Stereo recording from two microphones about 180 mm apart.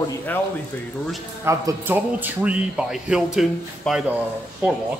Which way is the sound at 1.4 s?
20° right (ahead or behind).